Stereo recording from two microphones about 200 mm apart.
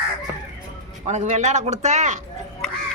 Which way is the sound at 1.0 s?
35° right (ahead or behind).